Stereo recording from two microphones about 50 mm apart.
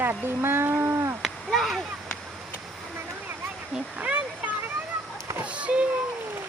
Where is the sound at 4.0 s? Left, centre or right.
Right.